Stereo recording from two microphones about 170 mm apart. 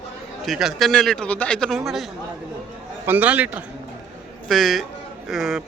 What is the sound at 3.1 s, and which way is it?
Speech, 10° right (ahead or behind).